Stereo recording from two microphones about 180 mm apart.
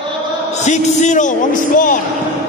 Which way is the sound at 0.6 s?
40° left (ahead or behind).